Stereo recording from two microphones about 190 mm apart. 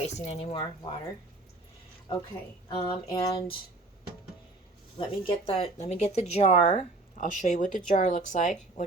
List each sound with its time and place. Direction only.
0.0 s speech: 35° left (ahead or behind)
2.8 s a sound: 20° left (ahead or behind)
4.9 s speech: 25° left (ahead or behind)